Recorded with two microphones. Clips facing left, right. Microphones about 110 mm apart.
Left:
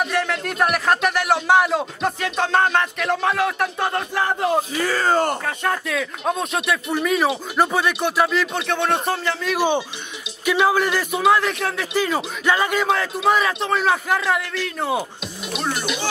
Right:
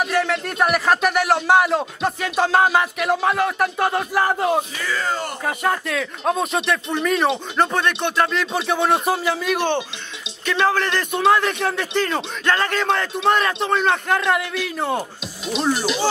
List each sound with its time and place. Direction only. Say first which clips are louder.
0.0 s speech: right 2 dB; centre (ahead or behind)
4.7 s speech: left 5 dB; 45° left (ahead or behind)
5.4 s speech: right 2 dB; 5° right (ahead or behind)
10.4 s speech: left 2 dB; 10° left (ahead or behind)